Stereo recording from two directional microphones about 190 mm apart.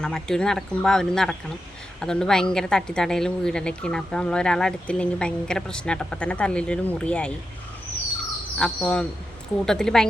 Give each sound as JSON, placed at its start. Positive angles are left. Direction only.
{"t": 0.0, "sound": "a woman's voice", "side_deg": 5}
{"t": 8.5, "sound": "a woman's voice", "side_deg": 5}